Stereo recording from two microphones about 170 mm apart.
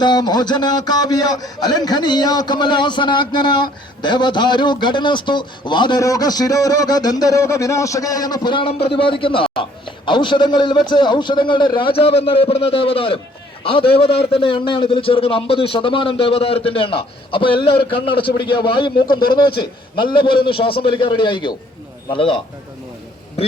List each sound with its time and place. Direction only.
0.0 s a man's voice: 25° left (ahead or behind)